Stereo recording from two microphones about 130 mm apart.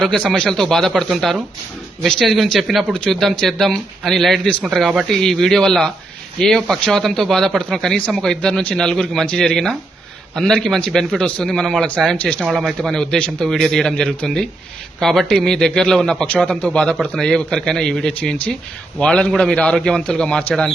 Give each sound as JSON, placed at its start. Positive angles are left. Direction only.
{"t": 0.0, "sound": "a man's voice", "side_deg": 5}